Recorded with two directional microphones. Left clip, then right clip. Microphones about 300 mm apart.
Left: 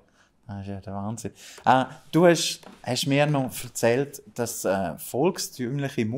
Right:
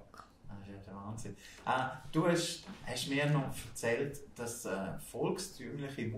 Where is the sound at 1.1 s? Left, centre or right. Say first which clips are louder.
Left 11 dB; left.